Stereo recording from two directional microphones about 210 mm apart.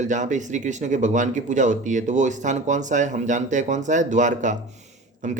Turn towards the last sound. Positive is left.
turn(degrees=-35)  # may be behind; listen again after turning